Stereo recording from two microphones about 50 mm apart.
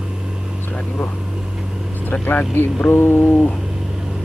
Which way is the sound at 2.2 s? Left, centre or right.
Left.